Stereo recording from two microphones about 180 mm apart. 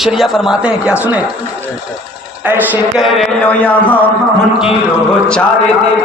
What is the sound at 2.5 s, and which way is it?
A man's voice, 10° right (ahead or behind).